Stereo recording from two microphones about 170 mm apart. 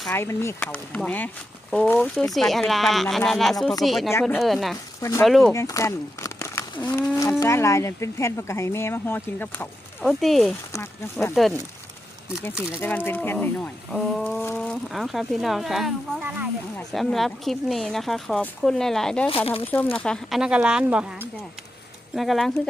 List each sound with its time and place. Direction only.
0.1 s speech: 15° left (ahead or behind); by 4.1 s centre (ahead or behind)
4.1 s speech: 10° left (ahead or behind)
4.4 s speech: centre (ahead or behind)
4.9 s speech: 20° left (ahead or behind)
5.2 s speech: 5° left (ahead or behind)
5.5 s speech: 20° left (ahead or behind)
10.0 s speech: centre (ahead or behind)
10.7 s speech: 15° left (ahead or behind)
12.6 s speech: 10° left (ahead or behind)
13.9 s speech: centre (ahead or behind)